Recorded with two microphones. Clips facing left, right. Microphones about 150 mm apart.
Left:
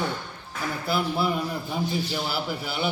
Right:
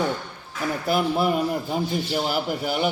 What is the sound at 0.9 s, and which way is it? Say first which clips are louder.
A man's voice: right 4 dB; 50° right (ahead or behind).